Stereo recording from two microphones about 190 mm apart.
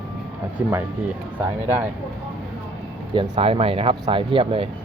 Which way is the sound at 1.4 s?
10° right (ahead or behind).